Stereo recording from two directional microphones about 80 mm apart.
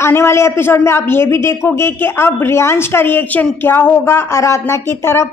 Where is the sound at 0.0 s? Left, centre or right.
Left.